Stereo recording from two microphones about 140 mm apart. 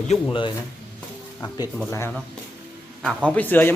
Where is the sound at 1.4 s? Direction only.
30° left (ahead or behind).